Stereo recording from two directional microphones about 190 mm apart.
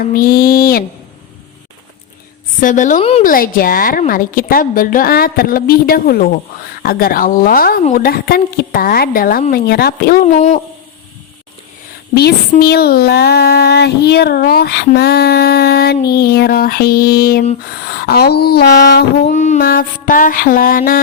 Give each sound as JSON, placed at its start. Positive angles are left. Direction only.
{"t": 0.0, "sound": "a woman's voice", "side_deg": 50}
{"t": 2.6, "sound": "a woman's voice", "side_deg": 45}
{"t": 3.2, "sound": "a woman's voice", "side_deg": 50}
{"t": 12.1, "sound": "speech", "side_deg": 55}
{"t": 19.3, "sound": "a woman's voice", "side_deg": 40}